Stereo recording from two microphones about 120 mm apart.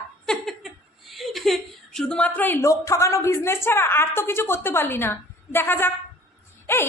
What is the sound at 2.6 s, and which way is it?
A woman's voice, 25° left (ahead or behind).